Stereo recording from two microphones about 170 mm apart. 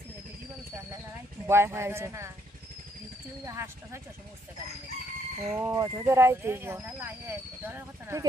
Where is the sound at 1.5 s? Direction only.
15° right (ahead or behind).